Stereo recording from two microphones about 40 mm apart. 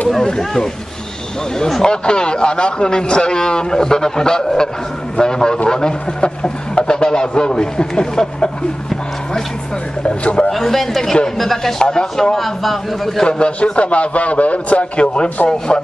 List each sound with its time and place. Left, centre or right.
1.6 s a man's voice: centre
10.0 s speech: left
10.5 s a man's voice: centre
11.8 s a man's voice: centre
12.4 s a man's voice: centre
13.2 s speech: centre
13.6 s a man's voice: left